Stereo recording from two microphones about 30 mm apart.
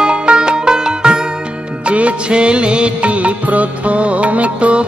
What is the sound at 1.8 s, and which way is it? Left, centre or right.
Music, right.